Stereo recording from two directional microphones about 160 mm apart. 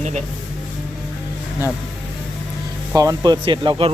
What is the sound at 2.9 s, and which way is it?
Speech, 25° right (ahead or behind).